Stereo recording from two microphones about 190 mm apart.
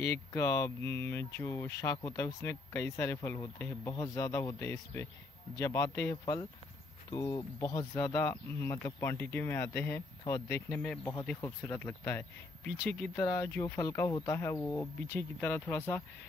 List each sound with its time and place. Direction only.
0.0 s speech: 15° left (ahead or behind)